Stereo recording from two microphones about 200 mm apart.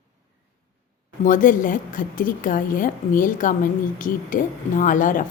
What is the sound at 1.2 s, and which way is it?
A woman's voice, 40° left (ahead or behind).